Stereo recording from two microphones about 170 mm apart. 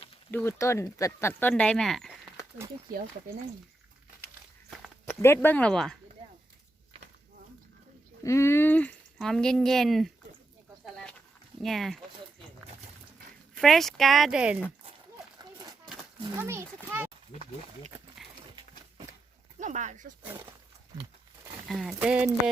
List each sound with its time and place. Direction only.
0.3 s speech: 10° left (ahead or behind)
5.0 s speech: 15° left (ahead or behind)
8.2 s speech: 15° left (ahead or behind); by 10.1 s centre (ahead or behind)
11.6 s speech: centre (ahead or behind)
13.6 s speech: centre (ahead or behind)
16.3 s a child's voice: 15° right (ahead or behind)
19.5 s speech: 45° right (ahead or behind)
21.7 s a child's voice: centre (ahead or behind)